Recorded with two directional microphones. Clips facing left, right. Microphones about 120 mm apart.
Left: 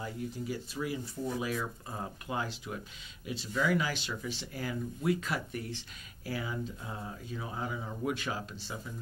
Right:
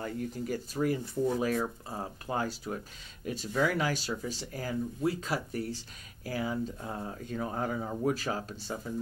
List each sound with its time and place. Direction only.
0.0 s speech: 50° right (ahead or behind)